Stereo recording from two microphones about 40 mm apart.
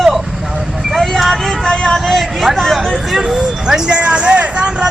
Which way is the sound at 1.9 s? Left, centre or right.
Centre.